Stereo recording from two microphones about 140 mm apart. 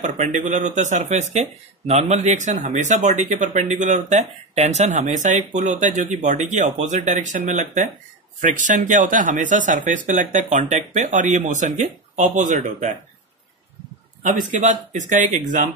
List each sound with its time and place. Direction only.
0.0 s speech: 60° right (ahead or behind)
14.5 s speech: 55° right (ahead or behind)